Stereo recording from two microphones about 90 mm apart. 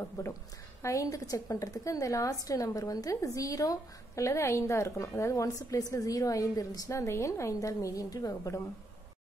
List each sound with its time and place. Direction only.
0.2 s speech: 35° left (ahead or behind)